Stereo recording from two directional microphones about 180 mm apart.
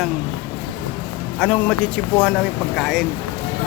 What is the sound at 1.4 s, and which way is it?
Speech, 5° left (ahead or behind).